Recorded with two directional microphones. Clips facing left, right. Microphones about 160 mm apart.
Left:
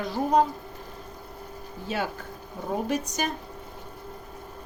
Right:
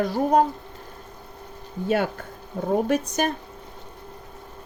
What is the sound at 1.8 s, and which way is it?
Speech, 55° right (ahead or behind).